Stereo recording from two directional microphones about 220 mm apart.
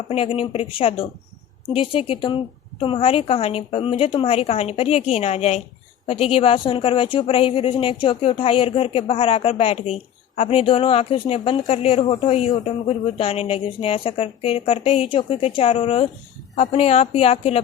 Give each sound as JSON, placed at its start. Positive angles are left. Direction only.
{"t": 0.1, "sound": "speech", "side_deg": 25}